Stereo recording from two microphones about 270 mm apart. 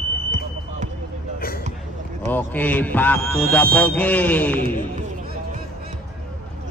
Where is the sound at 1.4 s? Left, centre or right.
Left.